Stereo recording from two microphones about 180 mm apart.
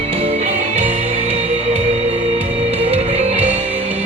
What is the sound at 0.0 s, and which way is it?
Music, 35° right (ahead or behind).